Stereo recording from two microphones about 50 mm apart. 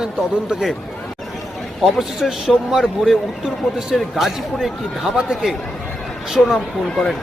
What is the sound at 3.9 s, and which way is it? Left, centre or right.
A man's voice, centre.